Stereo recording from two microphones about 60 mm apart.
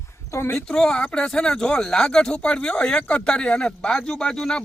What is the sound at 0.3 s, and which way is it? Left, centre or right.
Speech, left.